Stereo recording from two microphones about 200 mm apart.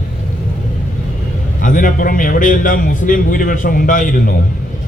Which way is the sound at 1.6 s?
40° left (ahead or behind).